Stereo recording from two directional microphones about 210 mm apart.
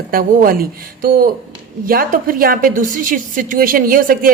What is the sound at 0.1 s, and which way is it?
Speech, 45° right (ahead or behind).